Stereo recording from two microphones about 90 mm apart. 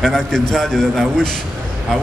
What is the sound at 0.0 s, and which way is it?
A man's voice, centre (ahead or behind).